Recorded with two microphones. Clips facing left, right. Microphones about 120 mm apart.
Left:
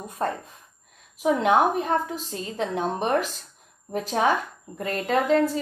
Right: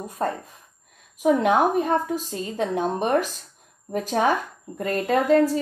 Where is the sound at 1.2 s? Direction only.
40° right (ahead or behind).